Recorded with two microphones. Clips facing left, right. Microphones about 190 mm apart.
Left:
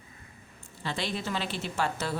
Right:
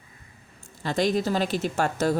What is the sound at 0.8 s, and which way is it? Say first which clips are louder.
Speech: right 9 dB; 45° right (ahead or behind).